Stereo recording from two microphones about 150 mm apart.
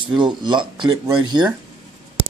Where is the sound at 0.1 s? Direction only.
30° right (ahead or behind).